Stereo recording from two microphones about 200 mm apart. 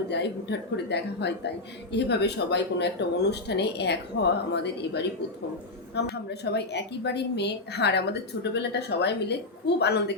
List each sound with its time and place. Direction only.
0.1 s a woman's voice: 60° left (ahead or behind)